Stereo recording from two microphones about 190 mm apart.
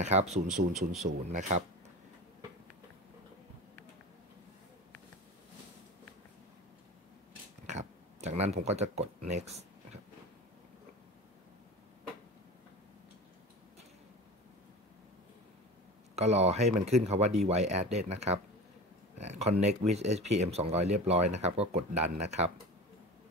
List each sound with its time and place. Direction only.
0.0 s speech: 35° right (ahead or behind)
0.3 s speech: centre (ahead or behind)
1.0 s speech: 40° right (ahead or behind)
7.6 s a sound: 35° right (ahead or behind)
16.2 s speech: 35° right (ahead or behind)